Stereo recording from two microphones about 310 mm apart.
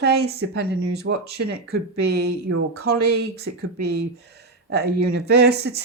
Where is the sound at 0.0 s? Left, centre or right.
Right.